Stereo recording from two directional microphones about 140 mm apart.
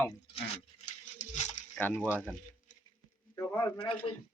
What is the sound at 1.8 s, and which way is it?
Speech, 10° left (ahead or behind).